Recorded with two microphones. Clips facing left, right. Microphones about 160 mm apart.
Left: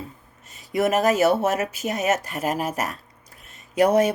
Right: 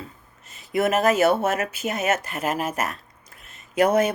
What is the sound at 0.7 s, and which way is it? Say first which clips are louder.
Speech: even; 40° left (ahead or behind).